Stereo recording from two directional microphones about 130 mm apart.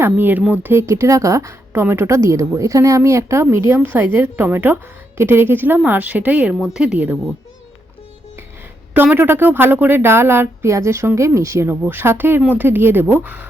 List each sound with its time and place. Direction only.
0.0 s speech: 15° right (ahead or behind)
8.9 s speech: 15° right (ahead or behind)